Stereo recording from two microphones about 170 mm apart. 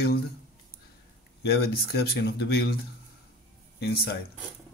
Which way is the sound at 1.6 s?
65° left (ahead or behind).